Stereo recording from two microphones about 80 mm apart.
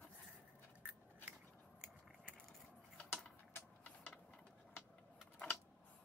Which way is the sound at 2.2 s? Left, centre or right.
Centre.